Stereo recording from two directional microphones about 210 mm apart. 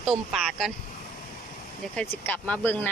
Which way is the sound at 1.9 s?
5° left (ahead or behind).